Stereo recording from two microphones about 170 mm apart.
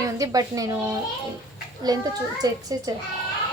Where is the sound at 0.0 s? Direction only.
20° right (ahead or behind).